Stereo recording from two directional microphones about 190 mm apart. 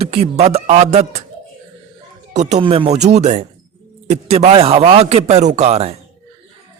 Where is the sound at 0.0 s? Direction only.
35° right (ahead or behind).